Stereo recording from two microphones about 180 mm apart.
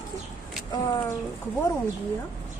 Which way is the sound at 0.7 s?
20° left (ahead or behind).